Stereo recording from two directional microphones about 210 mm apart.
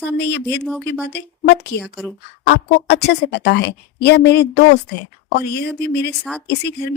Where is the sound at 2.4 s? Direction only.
50° left (ahead or behind).